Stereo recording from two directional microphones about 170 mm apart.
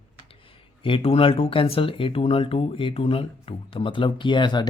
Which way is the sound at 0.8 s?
30° left (ahead or behind).